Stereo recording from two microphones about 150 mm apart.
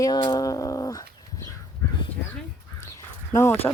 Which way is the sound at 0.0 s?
25° left (ahead or behind).